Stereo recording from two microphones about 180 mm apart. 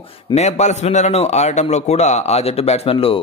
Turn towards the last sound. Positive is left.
turn(degrees=30)  # may be behind; listen again after turning